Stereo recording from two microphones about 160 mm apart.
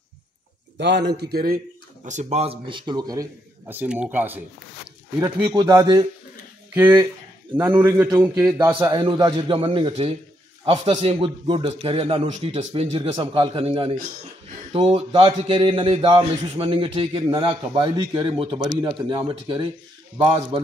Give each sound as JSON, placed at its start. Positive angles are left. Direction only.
{"t": 0.7, "sound": "a man's voice", "side_deg": -90}
{"t": 2.0, "sound": "a man's voice", "side_deg": -45}
{"t": 3.6, "sound": "speech", "side_deg": -10}
{"t": 5.5, "sound": "speech", "side_deg": -25}
{"t": 6.7, "sound": "a man's voice", "side_deg": -15}